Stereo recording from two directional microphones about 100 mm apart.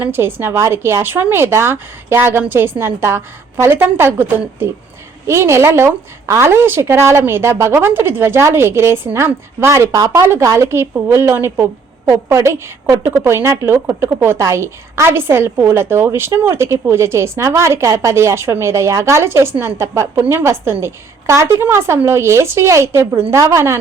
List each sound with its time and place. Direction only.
0.0 s a woman's voice: 20° right (ahead or behind)